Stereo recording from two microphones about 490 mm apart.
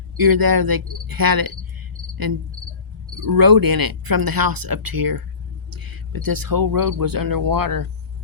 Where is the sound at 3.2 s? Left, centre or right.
Right.